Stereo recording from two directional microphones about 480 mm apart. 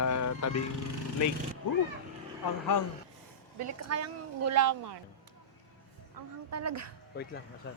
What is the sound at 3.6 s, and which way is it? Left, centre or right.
A woman's voice, right.